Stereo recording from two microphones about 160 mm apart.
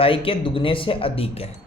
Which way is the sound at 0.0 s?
35° left (ahead or behind).